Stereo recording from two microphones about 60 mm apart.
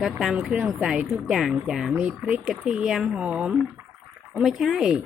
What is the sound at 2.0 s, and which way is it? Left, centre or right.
Speech, right.